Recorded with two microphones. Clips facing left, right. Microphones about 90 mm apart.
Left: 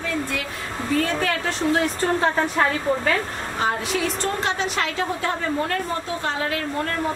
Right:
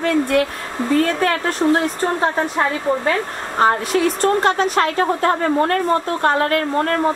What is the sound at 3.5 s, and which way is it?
A woman's voice, 50° right (ahead or behind).